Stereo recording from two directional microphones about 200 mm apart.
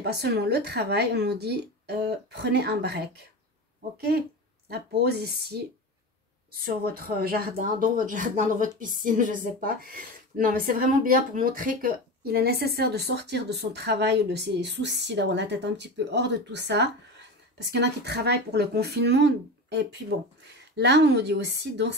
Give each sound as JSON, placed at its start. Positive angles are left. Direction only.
{"t": 0.0, "sound": "speech", "side_deg": -55}
{"t": 4.6, "sound": "a woman's voice", "side_deg": -55}